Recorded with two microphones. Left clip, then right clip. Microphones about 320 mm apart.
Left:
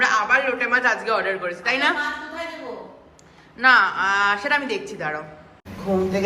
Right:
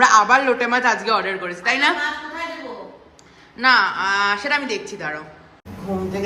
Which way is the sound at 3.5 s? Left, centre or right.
Centre.